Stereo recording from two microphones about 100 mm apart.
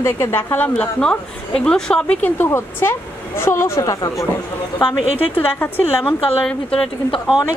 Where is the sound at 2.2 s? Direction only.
25° left (ahead or behind).